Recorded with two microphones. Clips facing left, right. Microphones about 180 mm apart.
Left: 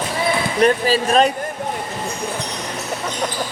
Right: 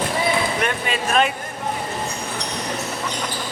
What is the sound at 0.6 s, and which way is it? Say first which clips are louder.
Speech: left 8 dB; 35° left (ahead or behind).